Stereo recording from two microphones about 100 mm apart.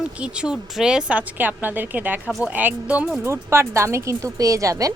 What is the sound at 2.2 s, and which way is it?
Speech, 5° right (ahead or behind).